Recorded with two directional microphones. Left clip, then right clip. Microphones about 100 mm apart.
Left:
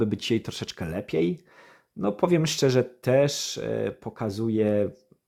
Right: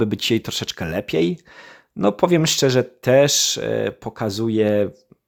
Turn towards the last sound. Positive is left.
turn(degrees=-30)  # may be behind; listen again after turning